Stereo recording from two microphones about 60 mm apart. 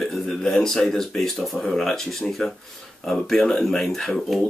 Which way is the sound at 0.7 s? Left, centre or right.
Centre.